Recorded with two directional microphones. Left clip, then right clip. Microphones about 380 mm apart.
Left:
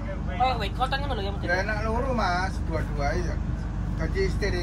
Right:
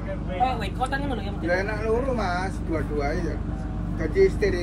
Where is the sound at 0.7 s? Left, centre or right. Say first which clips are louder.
Even; centre.